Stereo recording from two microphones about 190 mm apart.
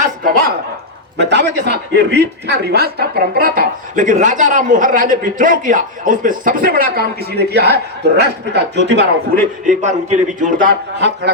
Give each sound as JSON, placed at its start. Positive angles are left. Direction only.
{"t": 0.2, "sound": "speech", "side_deg": -50}
{"t": 1.2, "sound": "a man's voice", "side_deg": -65}
{"t": 9.6, "sound": "a man's voice", "side_deg": -40}